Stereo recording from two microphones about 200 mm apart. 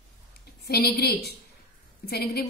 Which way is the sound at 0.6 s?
55° left (ahead or behind).